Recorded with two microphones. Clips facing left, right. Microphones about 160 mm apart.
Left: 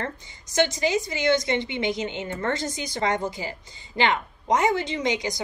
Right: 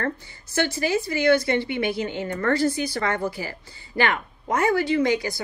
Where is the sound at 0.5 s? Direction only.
20° left (ahead or behind).